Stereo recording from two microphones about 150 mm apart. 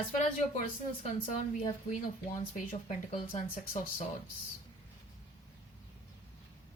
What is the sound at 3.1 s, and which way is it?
Speech, 45° left (ahead or behind).